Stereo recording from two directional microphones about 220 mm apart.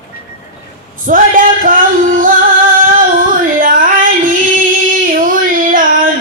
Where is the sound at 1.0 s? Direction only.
40° right (ahead or behind).